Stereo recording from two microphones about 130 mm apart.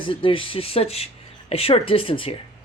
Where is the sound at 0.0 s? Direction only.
40° left (ahead or behind).